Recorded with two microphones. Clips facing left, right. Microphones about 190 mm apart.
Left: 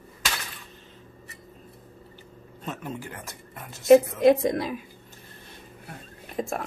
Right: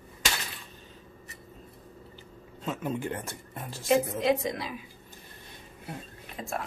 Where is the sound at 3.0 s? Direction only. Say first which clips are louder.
Right 6 dB; 25° right (ahead or behind).